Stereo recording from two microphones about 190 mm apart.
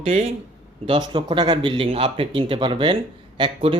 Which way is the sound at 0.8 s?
25° right (ahead or behind).